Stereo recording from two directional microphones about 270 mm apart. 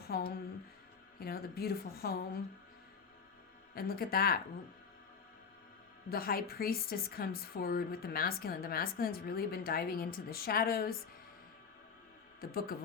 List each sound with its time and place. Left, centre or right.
0.0 s a woman's voice: left
3.8 s a woman's voice: left
6.1 s a woman's voice: left
12.4 s a woman's voice: left